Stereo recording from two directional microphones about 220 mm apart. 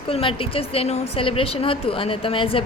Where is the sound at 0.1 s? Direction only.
25° left (ahead or behind).